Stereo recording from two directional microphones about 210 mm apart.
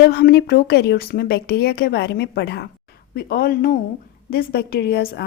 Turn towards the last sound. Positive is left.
turn(degrees=50)  # may be behind; listen again after turning